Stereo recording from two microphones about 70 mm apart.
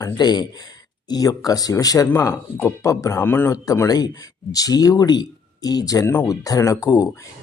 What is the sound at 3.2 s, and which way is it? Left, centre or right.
Speech, left.